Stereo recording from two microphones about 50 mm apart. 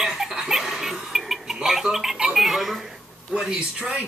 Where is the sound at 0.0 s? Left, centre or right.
Centre.